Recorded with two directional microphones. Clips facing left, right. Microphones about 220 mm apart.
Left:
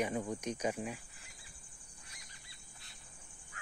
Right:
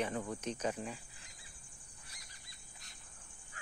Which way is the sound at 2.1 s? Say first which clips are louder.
Left 1 dB; 40° right (ahead or behind).